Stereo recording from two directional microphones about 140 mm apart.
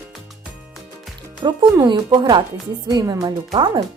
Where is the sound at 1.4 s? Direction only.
25° right (ahead or behind).